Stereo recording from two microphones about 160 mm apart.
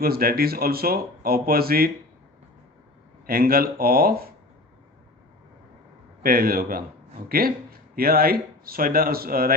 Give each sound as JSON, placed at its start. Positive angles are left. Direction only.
{"t": 0.0, "sound": "speech", "side_deg": -70}
{"t": 3.2, "sound": "speech", "side_deg": -70}
{"t": 6.2, "sound": "speech", "side_deg": -65}